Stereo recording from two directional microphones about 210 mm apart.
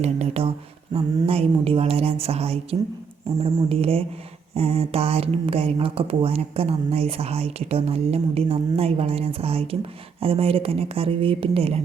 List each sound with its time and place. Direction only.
0.0 s speech: 30° right (ahead or behind)